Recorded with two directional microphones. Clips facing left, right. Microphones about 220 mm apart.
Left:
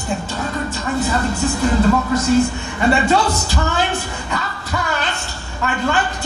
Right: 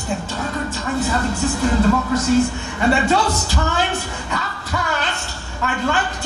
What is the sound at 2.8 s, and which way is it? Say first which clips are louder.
A man's voice: left 1 dB; 25° left (ahead or behind).